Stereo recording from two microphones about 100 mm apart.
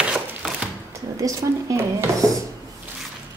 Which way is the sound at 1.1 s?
30° right (ahead or behind).